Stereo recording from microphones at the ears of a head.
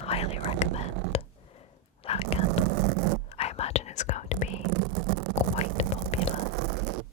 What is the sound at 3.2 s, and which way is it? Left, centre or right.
Whispering, left.